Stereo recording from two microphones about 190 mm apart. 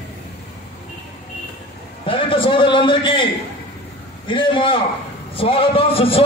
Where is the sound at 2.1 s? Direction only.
25° left (ahead or behind).